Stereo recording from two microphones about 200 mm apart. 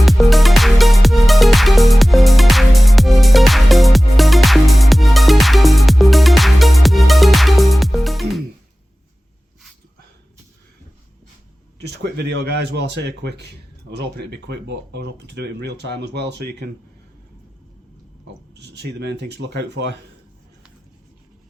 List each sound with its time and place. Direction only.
0.0 s music: centre (ahead or behind)
11.8 s a man's voice: 55° right (ahead or behind)
18.5 s speech: 60° right (ahead or behind)